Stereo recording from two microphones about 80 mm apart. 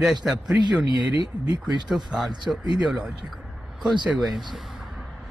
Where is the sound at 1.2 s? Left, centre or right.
Right.